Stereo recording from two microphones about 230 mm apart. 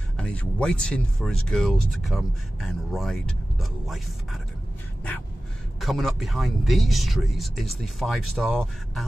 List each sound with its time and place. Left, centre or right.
0.2 s speech: centre
5.8 s speech: centre